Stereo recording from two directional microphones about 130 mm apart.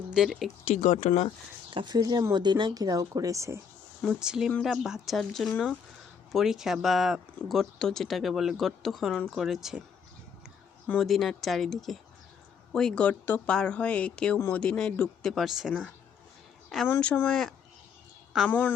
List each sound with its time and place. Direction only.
0.1 s speech: 5° right (ahead or behind)
0.7 s speech: 70° left (ahead or behind)
1.7 s speech: 35° right (ahead or behind)
4.0 s speech: 5° right (ahead or behind)
10.8 s speech: 5° left (ahead or behind)
14.6 s speech: 5° left (ahead or behind)
16.8 s speech: 10° left (ahead or behind)
18.4 s speech: 15° left (ahead or behind)